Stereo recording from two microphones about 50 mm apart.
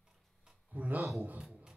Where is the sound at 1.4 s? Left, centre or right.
Centre.